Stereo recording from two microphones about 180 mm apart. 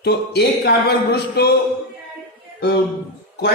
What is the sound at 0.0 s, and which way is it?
Speech, 65° left (ahead or behind).